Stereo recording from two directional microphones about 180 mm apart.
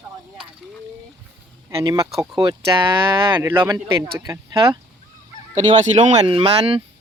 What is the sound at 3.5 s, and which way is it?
Speech, 10° right (ahead or behind).